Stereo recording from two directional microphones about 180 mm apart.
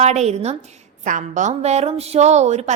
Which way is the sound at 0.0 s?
40° right (ahead or behind).